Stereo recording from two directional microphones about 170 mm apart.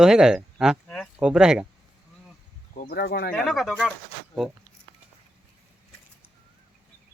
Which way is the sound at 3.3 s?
Centre (ahead or behind).